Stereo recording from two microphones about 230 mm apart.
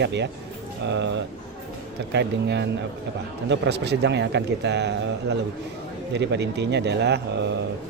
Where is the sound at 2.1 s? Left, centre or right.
Right.